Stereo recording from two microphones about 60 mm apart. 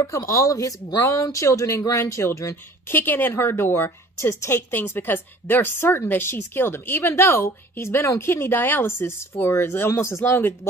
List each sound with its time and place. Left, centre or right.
0.0 s speech: left
2.9 s a woman's voice: left
4.6 s a woman's voice: left